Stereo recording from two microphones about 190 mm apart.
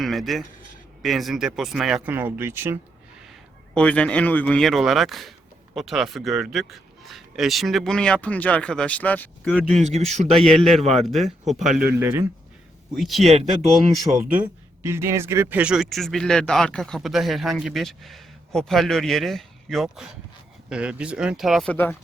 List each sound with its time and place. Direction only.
0.0 s a man's voice: centre (ahead or behind)
3.8 s speech: 5° left (ahead or behind)
9.8 s a man's voice: 35° right (ahead or behind)
10.4 s speech: centre (ahead or behind)
13.0 s speech: centre (ahead or behind)